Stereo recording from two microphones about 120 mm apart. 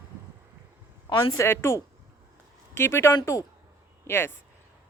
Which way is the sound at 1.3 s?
20° left (ahead or behind).